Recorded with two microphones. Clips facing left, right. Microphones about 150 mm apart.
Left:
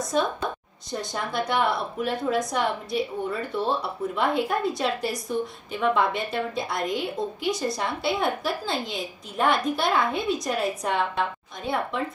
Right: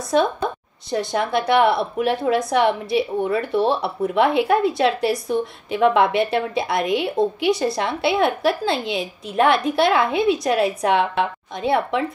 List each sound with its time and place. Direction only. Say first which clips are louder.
0.1 s a woman's voice: right 7 dB; 75° right (ahead or behind)